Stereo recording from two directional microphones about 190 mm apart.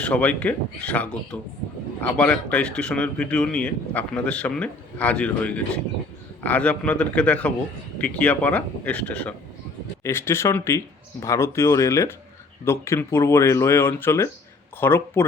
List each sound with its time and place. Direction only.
0.0 s speech: 5° left (ahead or behind)